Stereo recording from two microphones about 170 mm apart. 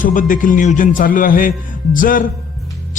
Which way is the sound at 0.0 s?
50° left (ahead or behind).